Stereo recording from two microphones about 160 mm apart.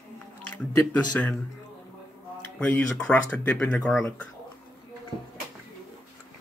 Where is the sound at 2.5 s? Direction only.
10° left (ahead or behind).